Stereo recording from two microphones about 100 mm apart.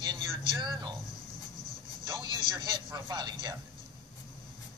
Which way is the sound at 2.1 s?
50° right (ahead or behind).